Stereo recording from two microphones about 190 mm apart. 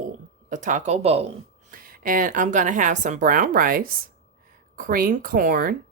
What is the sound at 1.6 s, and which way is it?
A woman's voice, 45° right (ahead or behind).